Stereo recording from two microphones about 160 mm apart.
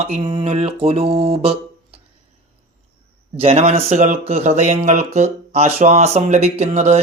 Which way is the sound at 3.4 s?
40° right (ahead or behind).